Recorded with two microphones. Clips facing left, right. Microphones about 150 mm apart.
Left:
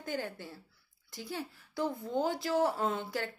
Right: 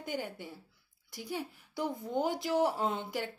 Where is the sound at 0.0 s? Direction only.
15° right (ahead or behind).